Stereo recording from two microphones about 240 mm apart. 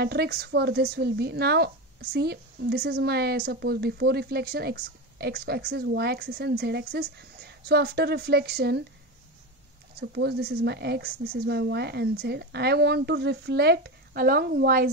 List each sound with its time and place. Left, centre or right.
0.0 s speech: right
9.9 s speech: right